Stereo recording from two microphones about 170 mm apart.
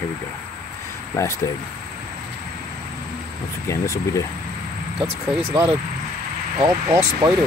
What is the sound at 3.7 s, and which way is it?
Speech, 15° left (ahead or behind).